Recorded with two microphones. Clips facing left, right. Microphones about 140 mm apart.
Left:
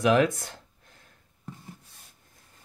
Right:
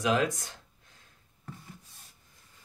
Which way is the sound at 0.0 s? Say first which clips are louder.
Left 5 dB; 65° left (ahead or behind).